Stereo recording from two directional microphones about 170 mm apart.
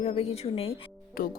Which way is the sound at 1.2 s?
60° left (ahead or behind).